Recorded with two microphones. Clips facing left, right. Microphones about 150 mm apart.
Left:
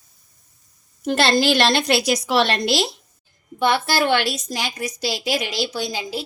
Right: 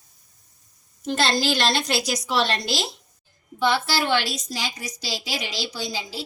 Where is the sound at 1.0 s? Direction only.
65° left (ahead or behind).